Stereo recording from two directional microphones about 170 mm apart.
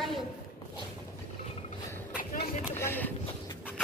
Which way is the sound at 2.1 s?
50° left (ahead or behind).